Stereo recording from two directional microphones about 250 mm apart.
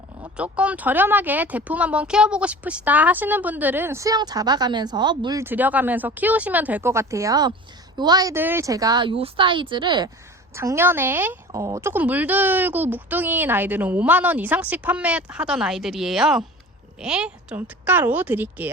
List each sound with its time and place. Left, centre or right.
0.3 s speech: centre